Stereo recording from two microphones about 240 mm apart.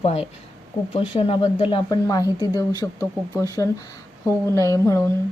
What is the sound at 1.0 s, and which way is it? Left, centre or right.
Speech, left.